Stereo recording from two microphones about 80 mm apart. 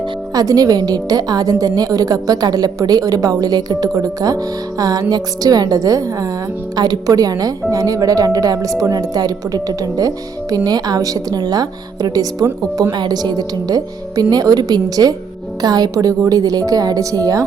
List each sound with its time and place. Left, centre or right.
0.3 s a woman's voice: right
12.9 s a woman's voice: right